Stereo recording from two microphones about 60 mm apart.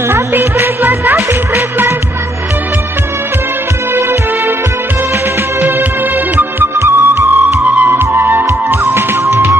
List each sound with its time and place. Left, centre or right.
0.1 s music: right
5.6 s music: right
6.6 s music: right
7.6 s music: right
7.9 s music: right